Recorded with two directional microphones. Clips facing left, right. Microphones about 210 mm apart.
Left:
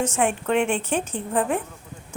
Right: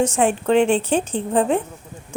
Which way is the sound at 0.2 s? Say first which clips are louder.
Right 4 dB; 30° right (ahead or behind).